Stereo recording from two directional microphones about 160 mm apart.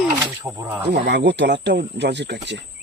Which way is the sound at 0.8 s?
90° right.